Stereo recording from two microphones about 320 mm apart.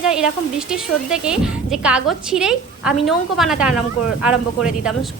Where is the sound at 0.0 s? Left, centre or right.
Centre.